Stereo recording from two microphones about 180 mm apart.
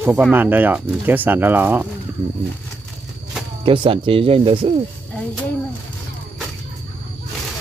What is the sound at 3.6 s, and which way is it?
Speech, 30° right (ahead or behind).